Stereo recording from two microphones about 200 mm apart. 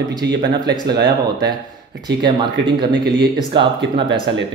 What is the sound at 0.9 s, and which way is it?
Speech, 55° right (ahead or behind).